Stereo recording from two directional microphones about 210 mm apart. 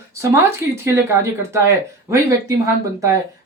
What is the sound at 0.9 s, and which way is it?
Speech, 15° right (ahead or behind).